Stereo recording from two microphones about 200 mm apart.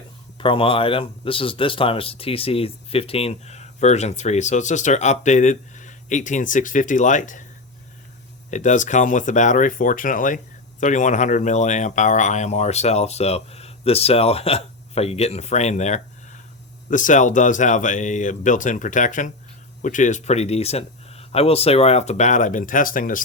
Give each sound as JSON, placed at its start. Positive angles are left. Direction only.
{"t": 0.3, "sound": "speech", "side_deg": 25}
{"t": 8.4, "sound": "speech", "side_deg": 35}